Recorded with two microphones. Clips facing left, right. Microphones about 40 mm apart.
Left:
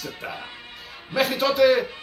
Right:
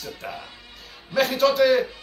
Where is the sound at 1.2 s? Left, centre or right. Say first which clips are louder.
Right 1 dB; centre.